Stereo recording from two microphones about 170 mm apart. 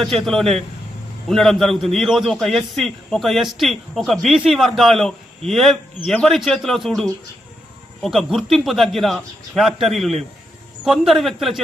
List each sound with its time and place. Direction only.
0.0 s a man's voice: centre (ahead or behind)